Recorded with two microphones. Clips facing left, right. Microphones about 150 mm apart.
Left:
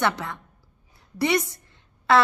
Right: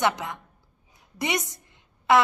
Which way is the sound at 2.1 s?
15° right (ahead or behind).